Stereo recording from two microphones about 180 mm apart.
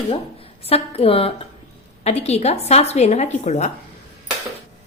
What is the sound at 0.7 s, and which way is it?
Speech, 35° left (ahead or behind).